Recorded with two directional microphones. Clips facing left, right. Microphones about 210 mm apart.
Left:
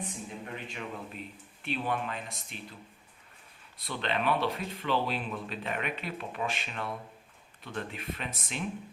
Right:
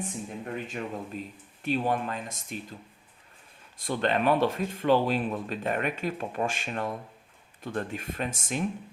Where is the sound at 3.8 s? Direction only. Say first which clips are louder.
Right 6 dB; 45° right (ahead or behind).